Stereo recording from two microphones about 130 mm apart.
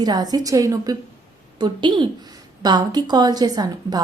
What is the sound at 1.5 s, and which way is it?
A woman's voice, 35° right (ahead or behind).